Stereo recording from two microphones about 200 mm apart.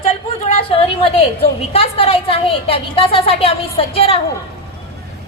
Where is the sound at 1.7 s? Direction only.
30° left (ahead or behind).